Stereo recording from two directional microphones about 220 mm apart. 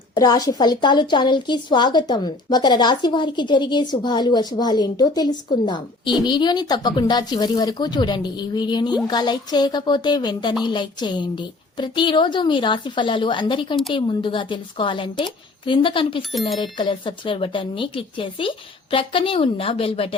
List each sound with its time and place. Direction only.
0.1 s a woman's voice: 20° left (ahead or behind)